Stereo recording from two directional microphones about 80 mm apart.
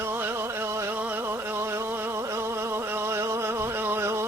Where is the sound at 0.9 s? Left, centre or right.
Right.